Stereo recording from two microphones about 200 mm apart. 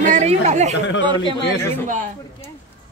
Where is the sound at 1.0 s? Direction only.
25° right (ahead or behind).